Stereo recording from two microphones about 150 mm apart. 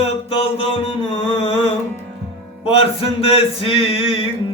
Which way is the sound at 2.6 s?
40° left (ahead or behind).